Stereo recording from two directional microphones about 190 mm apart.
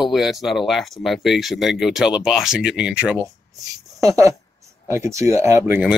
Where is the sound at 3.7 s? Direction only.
15° right (ahead or behind).